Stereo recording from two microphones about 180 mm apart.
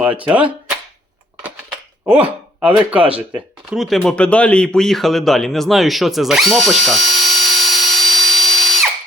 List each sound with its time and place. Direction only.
0.3 s speech: 10° right (ahead or behind)
2.0 s speech: 10° right (ahead or behind)